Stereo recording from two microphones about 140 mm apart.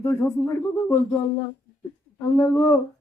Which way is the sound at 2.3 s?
20° left (ahead or behind).